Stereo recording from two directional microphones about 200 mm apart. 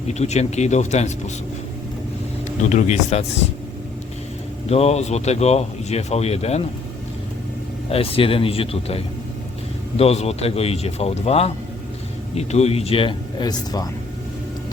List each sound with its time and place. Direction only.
0.1 s speech: 35° left (ahead or behind)
2.6 s speech: 35° left (ahead or behind)
4.7 s speech: 30° left (ahead or behind)
7.9 s a man's voice: 30° left (ahead or behind)